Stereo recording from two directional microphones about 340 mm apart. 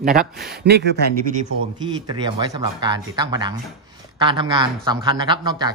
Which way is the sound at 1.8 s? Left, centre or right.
Centre.